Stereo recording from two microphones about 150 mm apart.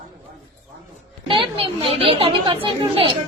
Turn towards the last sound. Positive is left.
turn(degrees=-35)  # may be behind; listen again after turning